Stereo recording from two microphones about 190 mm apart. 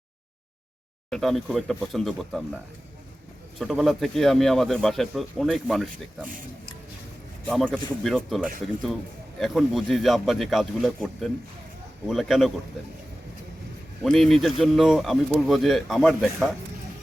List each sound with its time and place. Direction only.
1.1 s speech: centre (ahead or behind)
3.6 s speech: centre (ahead or behind)
6.2 s speech: 45° right (ahead or behind)
7.4 s speech: 5° left (ahead or behind)
14.0 s speech: centre (ahead or behind)